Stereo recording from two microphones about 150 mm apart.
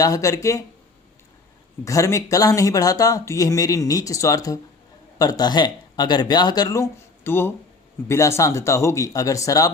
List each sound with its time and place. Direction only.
0.0 s speech: 20° left (ahead or behind)
1.8 s speech: 20° left (ahead or behind)
7.3 s speech: 15° left (ahead or behind)